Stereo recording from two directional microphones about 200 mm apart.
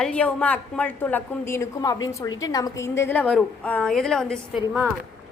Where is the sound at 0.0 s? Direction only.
5° left (ahead or behind).